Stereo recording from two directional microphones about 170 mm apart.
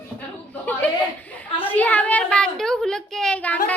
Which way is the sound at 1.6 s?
10° left (ahead or behind).